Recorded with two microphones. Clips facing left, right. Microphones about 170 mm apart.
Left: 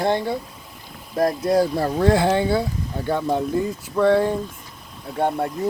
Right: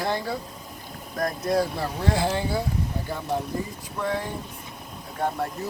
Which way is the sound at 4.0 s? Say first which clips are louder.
Left 11 dB; 75° left (ahead or behind).